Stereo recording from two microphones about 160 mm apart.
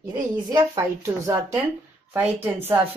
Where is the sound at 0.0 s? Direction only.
25° right (ahead or behind).